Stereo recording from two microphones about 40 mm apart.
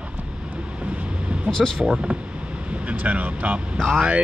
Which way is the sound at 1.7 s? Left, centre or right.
Centre.